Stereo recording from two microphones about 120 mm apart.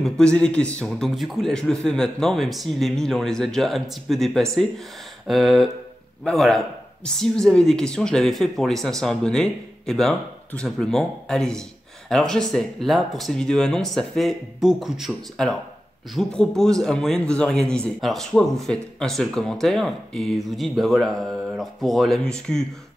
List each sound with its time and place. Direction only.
0.0 s speech: 5° left (ahead or behind)